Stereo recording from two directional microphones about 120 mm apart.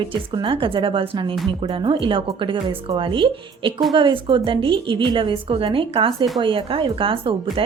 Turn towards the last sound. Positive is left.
turn(degrees=-50)  # may be behind; listen again after turning